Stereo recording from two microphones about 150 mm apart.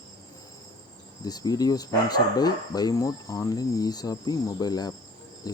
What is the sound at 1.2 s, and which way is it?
Speech, 25° left (ahead or behind).